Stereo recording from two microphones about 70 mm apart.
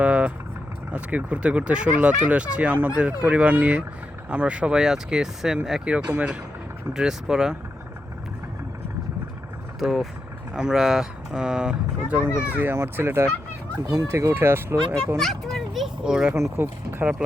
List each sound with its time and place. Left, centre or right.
0.0 s vehicle: centre
0.9 s speech: right
5.8 s speech: centre
9.8 s speech: centre
12.5 s speech: right
14.9 s a child's voice: centre
16.3 s speech: right